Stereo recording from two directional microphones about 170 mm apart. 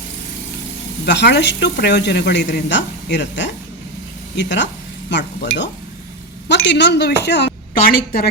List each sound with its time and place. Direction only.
1.0 s a woman's voice: 90° left
7.7 s a woman's voice: 60° left (ahead or behind)